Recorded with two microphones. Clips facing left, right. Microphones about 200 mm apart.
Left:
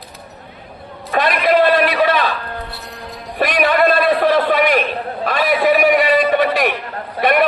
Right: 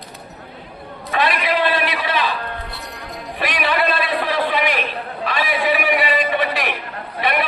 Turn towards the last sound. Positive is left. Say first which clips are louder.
# left 6 dB
turn(degrees=45)  # may be behind; listen again after turning